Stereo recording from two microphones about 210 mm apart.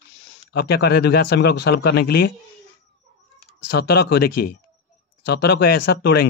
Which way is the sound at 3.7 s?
50° left (ahead or behind).